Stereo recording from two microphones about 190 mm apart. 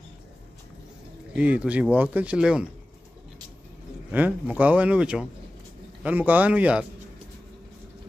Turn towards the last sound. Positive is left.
turn(degrees=-5)  # may be behind; listen again after turning